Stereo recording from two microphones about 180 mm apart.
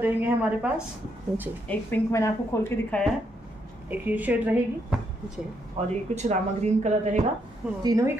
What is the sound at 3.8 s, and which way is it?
A woman's voice, 10° right (ahead or behind).